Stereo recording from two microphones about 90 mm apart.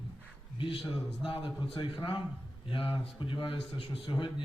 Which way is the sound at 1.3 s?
65° left (ahead or behind).